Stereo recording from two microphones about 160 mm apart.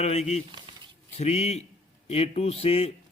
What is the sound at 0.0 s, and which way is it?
Speech, 40° left (ahead or behind).